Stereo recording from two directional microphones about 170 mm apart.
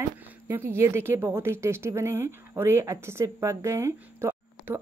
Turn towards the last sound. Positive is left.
turn(degrees=-15)  # may be behind; listen again after turning